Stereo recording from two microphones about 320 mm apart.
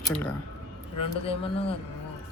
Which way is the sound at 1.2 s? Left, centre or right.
Centre.